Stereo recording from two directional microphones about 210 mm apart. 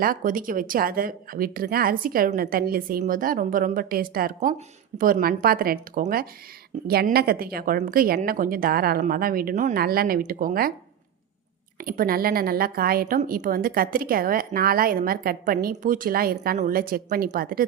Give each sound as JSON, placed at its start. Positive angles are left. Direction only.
{"t": 0.0, "sound": "a woman's voice", "side_deg": -40}
{"t": 11.8, "sound": "a woman's voice", "side_deg": -40}